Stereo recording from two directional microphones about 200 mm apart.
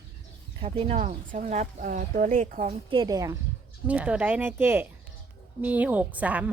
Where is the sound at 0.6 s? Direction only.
30° right (ahead or behind).